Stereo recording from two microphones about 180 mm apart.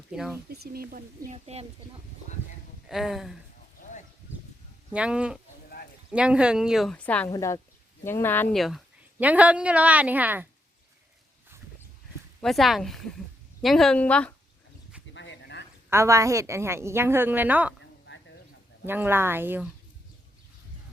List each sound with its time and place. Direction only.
0.1 s speech: centre (ahead or behind)
0.4 s speech: 60° right (ahead or behind)
2.9 s a woman's voice: centre (ahead or behind)
4.9 s a woman's voice: 5° right (ahead or behind)
7.3 s speech: 15° left (ahead or behind)
8.5 s a woman's voice: centre (ahead or behind)
12.4 s a woman's voice: centre (ahead or behind)
15.1 s a sound: 80° left
15.9 s a woman's voice: 15° right (ahead or behind)
18.9 s a woman's voice: 10° right (ahead or behind)